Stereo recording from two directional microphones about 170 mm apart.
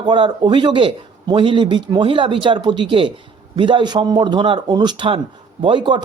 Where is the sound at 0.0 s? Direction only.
25° right (ahead or behind).